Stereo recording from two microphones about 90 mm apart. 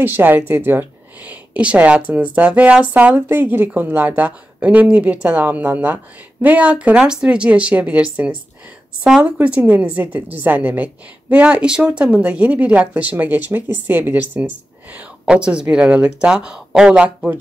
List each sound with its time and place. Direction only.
0.0 s a woman's voice: 20° right (ahead or behind)